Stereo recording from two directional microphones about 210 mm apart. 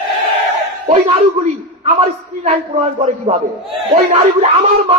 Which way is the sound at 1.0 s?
25° right (ahead or behind).